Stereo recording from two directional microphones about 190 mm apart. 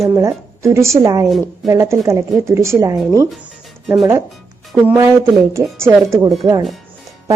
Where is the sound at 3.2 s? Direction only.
Centre (ahead or behind).